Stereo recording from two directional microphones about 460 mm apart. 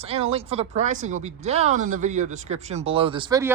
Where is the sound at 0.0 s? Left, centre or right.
Centre.